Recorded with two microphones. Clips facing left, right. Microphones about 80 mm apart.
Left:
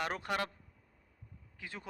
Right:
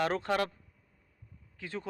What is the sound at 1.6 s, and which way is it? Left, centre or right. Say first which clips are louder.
Speech: right 6 dB; centre.